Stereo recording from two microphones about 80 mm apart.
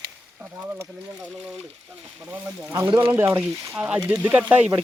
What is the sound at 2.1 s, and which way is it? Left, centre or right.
Speech, right.